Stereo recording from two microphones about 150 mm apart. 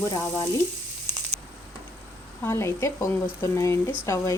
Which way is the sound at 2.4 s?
15° left (ahead or behind).